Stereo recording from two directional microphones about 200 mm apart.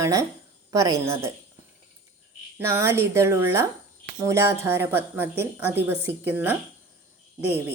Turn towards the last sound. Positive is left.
turn(degrees=-10)  # may be behind; listen again after turning